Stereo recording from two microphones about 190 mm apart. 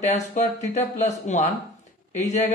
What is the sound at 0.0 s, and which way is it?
A man's voice, 40° left (ahead or behind).